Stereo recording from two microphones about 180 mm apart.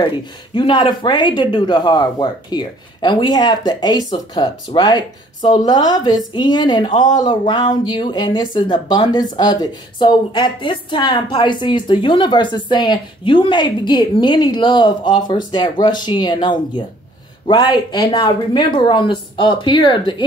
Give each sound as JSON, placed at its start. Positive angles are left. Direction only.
{"t": 0.6, "sound": "a woman's voice", "side_deg": 25}